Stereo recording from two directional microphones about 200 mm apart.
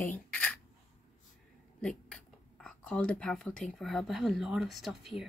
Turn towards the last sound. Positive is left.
turn(degrees=0)  # may be behind; listen again after turning